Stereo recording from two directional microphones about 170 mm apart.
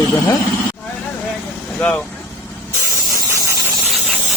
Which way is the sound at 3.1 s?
20° right (ahead or behind).